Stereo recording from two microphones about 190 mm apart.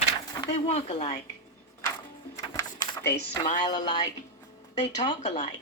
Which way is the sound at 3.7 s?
25° left (ahead or behind).